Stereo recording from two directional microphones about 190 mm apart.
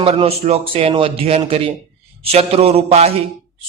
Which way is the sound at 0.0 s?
30° right (ahead or behind).